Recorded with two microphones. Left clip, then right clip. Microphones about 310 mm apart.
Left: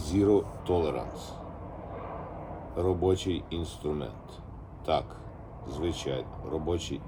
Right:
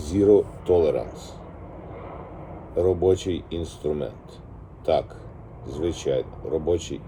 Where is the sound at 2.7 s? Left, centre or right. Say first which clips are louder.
Right 7 dB; centre.